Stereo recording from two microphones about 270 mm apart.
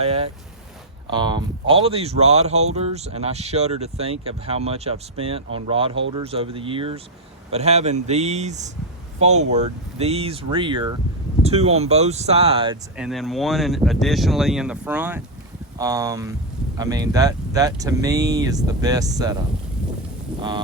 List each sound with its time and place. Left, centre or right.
0.0 s speech: right
13.0 s speech: centre